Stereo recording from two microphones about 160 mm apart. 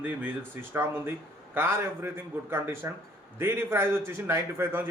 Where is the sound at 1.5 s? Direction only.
15° right (ahead or behind).